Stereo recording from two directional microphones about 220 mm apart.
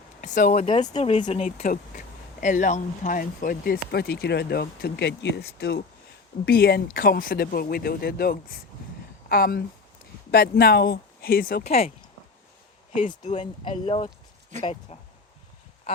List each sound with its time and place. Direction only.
0.2 s speech: 35° left (ahead or behind)
13.1 s speech: 30° left (ahead or behind)